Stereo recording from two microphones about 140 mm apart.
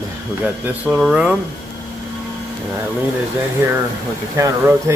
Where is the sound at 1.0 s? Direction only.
Centre (ahead or behind).